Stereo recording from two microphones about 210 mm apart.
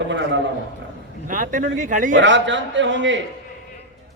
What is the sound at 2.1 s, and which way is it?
A man's voice, 60° right (ahead or behind).